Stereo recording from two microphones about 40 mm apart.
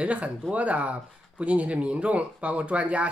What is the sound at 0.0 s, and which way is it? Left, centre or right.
Speech, right.